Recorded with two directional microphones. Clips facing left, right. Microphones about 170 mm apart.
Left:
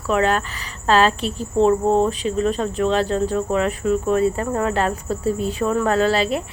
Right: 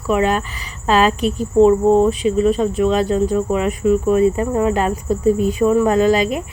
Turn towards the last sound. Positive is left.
turn(degrees=-15)  # may be behind; listen again after turning